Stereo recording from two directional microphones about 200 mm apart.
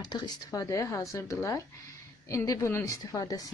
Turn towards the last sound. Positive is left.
turn(degrees=20)  # may be behind; listen again after turning